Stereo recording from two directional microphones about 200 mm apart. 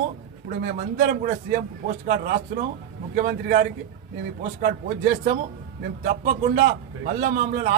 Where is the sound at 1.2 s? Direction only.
40° right (ahead or behind).